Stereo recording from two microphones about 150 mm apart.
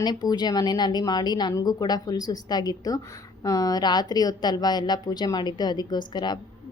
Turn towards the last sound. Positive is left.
turn(degrees=30)  # may be behind; listen again after turning